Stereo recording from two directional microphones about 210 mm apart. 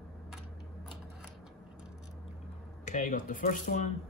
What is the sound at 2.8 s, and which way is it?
Speech, 35° left (ahead or behind).